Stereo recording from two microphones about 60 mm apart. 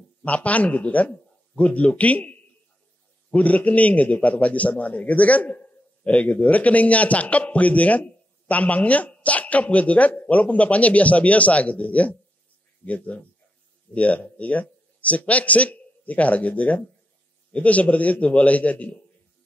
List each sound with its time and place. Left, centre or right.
0.2 s a man's voice: left